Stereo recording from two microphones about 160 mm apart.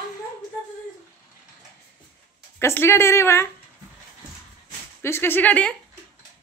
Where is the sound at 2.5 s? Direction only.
15° left (ahead or behind).